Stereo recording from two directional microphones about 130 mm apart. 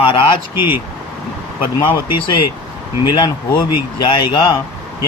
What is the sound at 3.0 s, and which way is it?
Speech, 35° left (ahead or behind).